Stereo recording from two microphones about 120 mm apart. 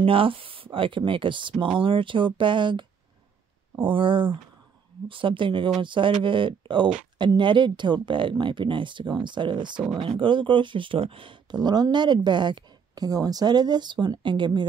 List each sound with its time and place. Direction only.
0.0 s speech: 50° right (ahead or behind)